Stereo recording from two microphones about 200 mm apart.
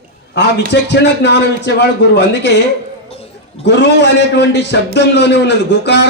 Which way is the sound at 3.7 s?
60° left (ahead or behind).